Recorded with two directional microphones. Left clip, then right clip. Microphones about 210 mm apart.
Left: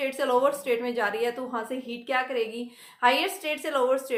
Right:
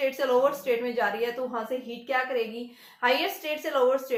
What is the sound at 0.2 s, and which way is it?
A woman's voice, 30° left (ahead or behind).